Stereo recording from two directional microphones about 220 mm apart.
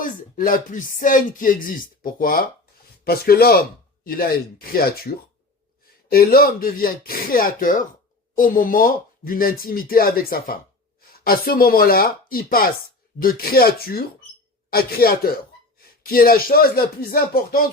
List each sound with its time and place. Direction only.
0.0 s speech: 40° left (ahead or behind)